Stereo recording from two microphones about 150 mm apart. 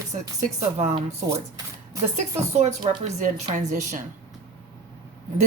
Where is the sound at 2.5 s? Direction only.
45° right (ahead or behind).